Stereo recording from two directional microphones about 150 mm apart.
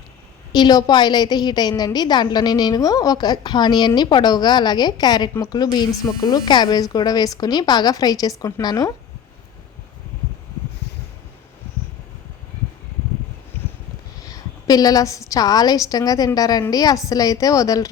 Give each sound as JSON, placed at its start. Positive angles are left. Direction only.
{"t": 0.5, "sound": "a woman's voice", "side_deg": 25}
{"t": 14.2, "sound": "a sound", "side_deg": 25}
{"t": 15.3, "sound": "a woman's voice", "side_deg": 25}